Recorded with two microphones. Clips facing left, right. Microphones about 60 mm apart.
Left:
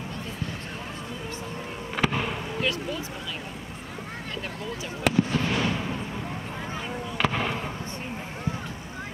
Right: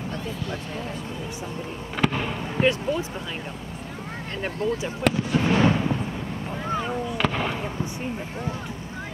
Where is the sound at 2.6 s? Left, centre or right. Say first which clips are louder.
Right 8 dB; right.